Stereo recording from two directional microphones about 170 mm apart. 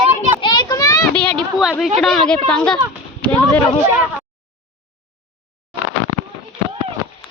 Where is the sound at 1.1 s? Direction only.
5° left (ahead or behind).